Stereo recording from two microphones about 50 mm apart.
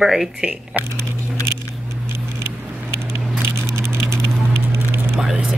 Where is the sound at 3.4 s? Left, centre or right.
Right.